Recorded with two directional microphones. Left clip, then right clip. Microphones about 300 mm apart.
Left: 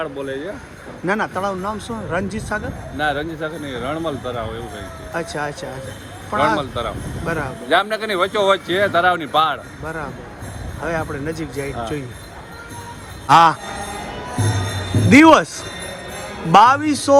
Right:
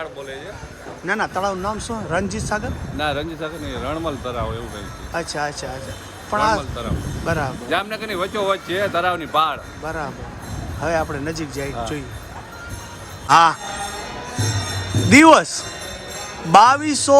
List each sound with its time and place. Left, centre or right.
1.0 s speech: centre
13.2 s speech: centre
15.1 s speech: centre